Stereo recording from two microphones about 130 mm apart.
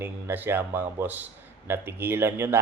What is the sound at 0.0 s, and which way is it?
A man's voice, 15° right (ahead or behind).